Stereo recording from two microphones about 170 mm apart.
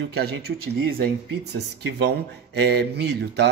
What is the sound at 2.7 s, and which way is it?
Speech, 75° right (ahead or behind).